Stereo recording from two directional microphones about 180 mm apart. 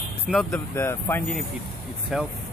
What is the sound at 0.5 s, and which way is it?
Speech, 15° left (ahead or behind).